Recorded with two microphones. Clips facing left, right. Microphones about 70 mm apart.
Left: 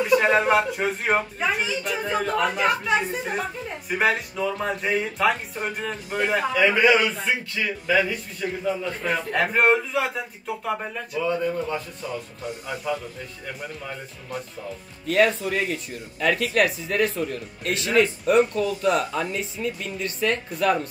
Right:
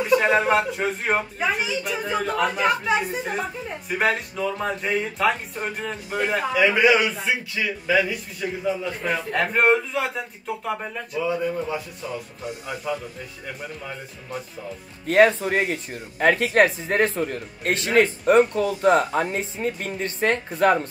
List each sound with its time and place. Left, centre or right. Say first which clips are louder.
0.0 s a man's voice: even; centre
15.0 s speech: right 4 dB; right